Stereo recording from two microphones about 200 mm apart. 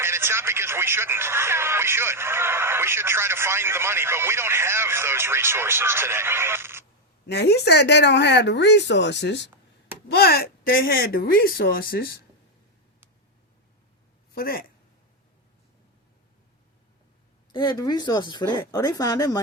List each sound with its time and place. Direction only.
0.0 s speech: 10° right (ahead or behind)
7.3 s speech: 55° left (ahead or behind)
14.3 s speech: 50° left (ahead or behind)
17.5 s speech: 20° left (ahead or behind)